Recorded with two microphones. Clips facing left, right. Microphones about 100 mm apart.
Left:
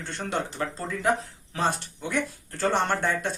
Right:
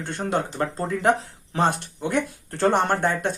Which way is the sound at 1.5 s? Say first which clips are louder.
Right 5 dB; 55° right (ahead or behind).